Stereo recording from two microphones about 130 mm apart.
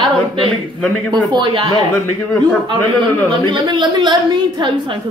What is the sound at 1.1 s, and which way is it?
Speech, 35° right (ahead or behind).